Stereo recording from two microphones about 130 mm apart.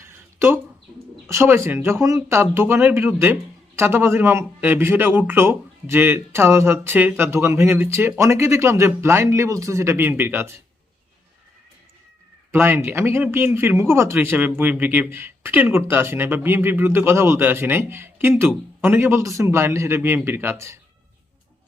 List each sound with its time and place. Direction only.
0.3 s a sound: 20° right (ahead or behind)
1.3 s speech: 20° right (ahead or behind)
12.5 s speech: 15° right (ahead or behind)